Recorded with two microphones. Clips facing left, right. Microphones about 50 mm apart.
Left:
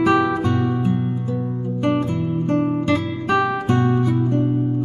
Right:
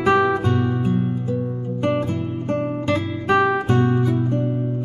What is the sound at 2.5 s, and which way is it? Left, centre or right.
Music, centre.